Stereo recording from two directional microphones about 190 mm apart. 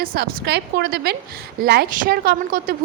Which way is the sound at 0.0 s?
55° right (ahead or behind).